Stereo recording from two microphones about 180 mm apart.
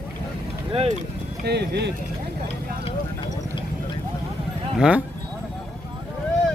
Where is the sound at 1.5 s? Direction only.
65° right (ahead or behind).